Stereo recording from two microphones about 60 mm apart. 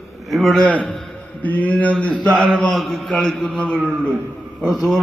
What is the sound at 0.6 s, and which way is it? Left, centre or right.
Mantra, left.